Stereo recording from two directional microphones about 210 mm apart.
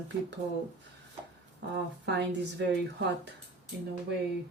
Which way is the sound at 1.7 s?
55° right (ahead or behind).